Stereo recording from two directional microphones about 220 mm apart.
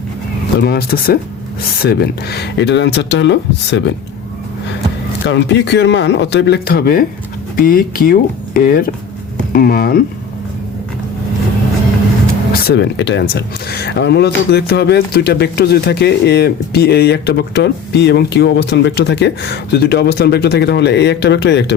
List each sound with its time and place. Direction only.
0.6 s speech: 45° left (ahead or behind)
5.2 s speech: 55° left (ahead or behind)
12.6 s speech: 50° left (ahead or behind)